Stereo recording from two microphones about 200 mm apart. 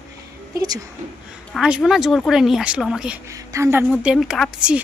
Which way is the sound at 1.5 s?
5° right (ahead or behind).